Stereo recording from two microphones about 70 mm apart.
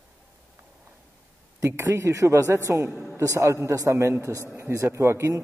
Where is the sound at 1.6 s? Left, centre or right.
Right.